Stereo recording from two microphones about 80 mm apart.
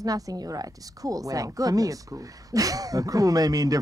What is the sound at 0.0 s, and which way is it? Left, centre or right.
Speech, right.